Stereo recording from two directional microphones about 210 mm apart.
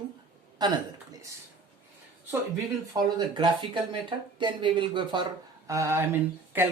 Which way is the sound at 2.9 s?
20° right (ahead or behind).